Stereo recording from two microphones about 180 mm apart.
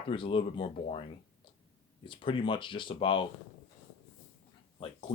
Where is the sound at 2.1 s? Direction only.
30° left (ahead or behind).